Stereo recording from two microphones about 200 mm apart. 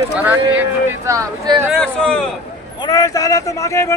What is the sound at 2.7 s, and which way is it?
Speech, 15° left (ahead or behind).